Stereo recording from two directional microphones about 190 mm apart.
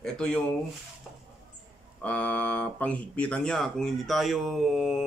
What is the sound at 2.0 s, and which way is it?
Speech, 10° left (ahead or behind).